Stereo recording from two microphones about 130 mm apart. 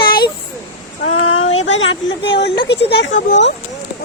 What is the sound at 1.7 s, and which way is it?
Speech, 45° left (ahead or behind).